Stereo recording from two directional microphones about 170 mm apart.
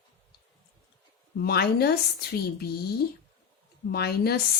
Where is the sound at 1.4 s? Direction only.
70° left (ahead or behind).